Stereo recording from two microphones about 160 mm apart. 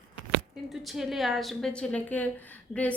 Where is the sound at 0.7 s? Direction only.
Centre (ahead or behind).